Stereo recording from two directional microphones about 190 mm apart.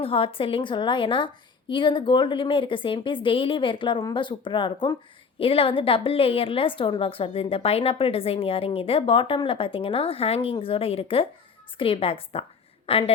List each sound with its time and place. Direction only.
0.0 s a woman's voice: 30° left (ahead or behind)